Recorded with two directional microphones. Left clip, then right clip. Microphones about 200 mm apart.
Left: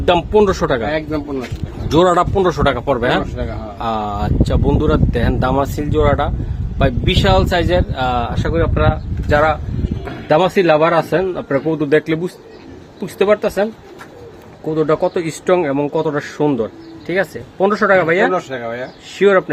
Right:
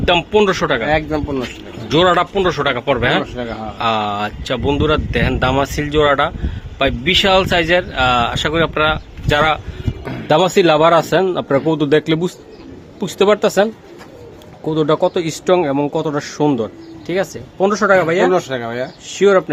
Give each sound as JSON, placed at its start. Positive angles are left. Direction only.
{"t": 0.0, "sound": "speech", "side_deg": 15}
{"t": 0.9, "sound": "a man's voice", "side_deg": -50}
{"t": 1.9, "sound": "speech", "side_deg": 25}
{"t": 3.8, "sound": "speech", "side_deg": 10}
{"t": 10.2, "sound": "speech", "side_deg": -20}
{"t": 14.8, "sound": "speech", "side_deg": -10}
{"t": 18.3, "sound": "speech", "side_deg": -55}
{"t": 19.1, "sound": "speech", "side_deg": 0}